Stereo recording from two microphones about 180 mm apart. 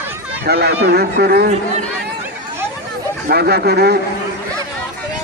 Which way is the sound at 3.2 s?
60° right (ahead or behind).